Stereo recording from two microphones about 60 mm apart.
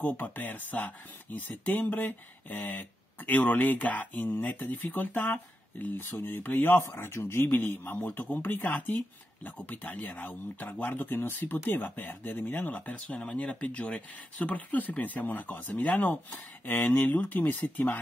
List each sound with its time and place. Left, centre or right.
0.0 s speech: left